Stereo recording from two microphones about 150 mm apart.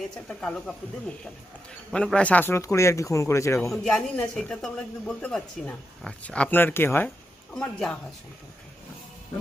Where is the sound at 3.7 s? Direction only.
5° left (ahead or behind).